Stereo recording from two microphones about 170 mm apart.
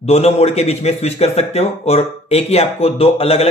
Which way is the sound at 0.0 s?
40° left (ahead or behind).